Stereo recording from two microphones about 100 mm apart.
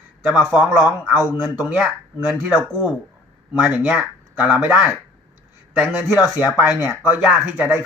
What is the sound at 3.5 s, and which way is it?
A man's voice, 10° right (ahead or behind).